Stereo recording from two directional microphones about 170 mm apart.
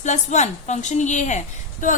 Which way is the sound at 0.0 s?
45° left (ahead or behind).